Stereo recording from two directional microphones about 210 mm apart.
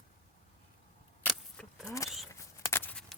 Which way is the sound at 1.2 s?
Centre (ahead or behind).